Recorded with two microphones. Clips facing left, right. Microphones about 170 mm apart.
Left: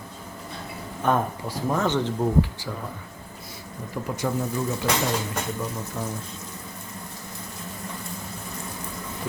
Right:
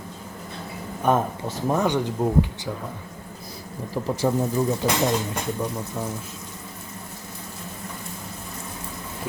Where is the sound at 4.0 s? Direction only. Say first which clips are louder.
Right 4 dB; 25° right (ahead or behind).